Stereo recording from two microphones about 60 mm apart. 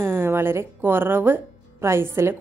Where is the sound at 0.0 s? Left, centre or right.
Right.